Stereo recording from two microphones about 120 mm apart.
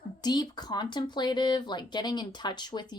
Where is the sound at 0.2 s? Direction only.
35° left (ahead or behind).